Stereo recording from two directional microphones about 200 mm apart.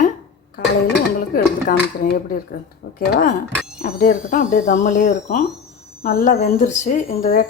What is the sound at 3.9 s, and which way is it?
Speech, 40° left (ahead or behind).